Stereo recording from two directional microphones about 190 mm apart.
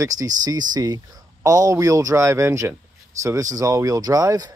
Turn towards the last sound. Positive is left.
turn(degrees=-20)  # may be behind; listen again after turning